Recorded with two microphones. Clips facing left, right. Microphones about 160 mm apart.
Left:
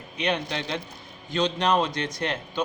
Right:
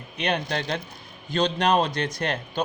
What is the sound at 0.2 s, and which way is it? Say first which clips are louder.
Speech: right 1 dB; 50° right (ahead or behind).